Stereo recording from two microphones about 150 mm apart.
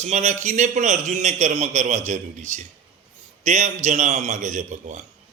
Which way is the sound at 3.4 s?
50° right (ahead or behind).